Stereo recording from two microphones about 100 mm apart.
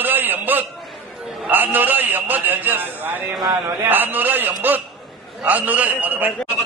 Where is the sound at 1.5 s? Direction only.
20° right (ahead or behind).